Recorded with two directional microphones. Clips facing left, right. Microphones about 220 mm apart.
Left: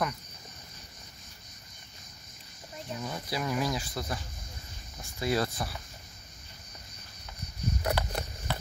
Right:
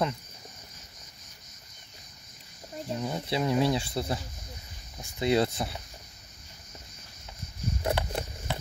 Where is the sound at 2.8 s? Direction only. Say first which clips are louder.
Right 5 dB; 30° right (ahead or behind).